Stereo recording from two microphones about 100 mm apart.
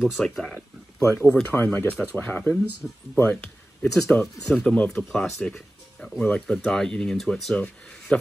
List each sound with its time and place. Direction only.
0.2 s speech: 5° left (ahead or behind)
1.0 s speech: 25° left (ahead or behind)
2.8 s a man's voice: 5° left (ahead or behind)